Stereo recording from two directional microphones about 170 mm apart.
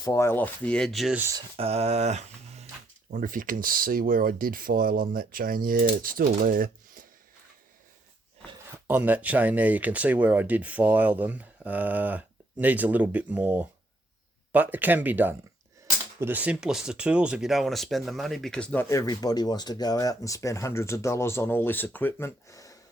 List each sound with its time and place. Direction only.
0.0 s speech: 15° left (ahead or behind); by 1.2 s centre (ahead or behind)
1.2 s speech: 20° right (ahead or behind)
1.5 s speech: 35° right (ahead or behind)
3.1 s speech: 50° right (ahead or behind)
8.9 s speech: 10° right (ahead or behind); by 22.8 s 20° left (ahead or behind)